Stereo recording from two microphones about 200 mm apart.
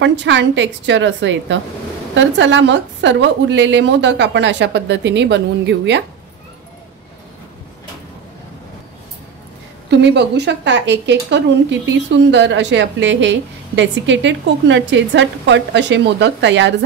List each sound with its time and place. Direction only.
0.0 s speech: 65° right (ahead or behind)
9.8 s speech: 60° right (ahead or behind)